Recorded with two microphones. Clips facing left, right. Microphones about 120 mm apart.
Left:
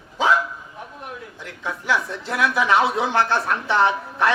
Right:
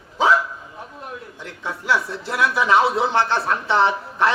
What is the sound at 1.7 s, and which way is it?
Speech, 30° right (ahead or behind).